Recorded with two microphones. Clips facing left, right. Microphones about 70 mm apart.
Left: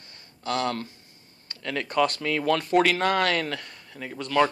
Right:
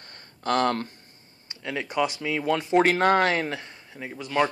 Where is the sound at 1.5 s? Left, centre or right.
Centre.